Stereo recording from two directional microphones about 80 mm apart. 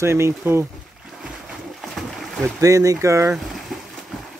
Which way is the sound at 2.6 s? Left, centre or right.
Right.